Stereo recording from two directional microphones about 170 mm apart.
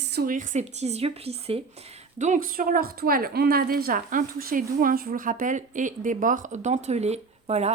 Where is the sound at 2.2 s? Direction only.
50° right (ahead or behind).